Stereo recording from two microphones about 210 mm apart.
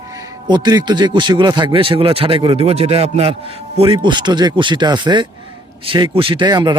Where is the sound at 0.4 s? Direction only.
20° right (ahead or behind).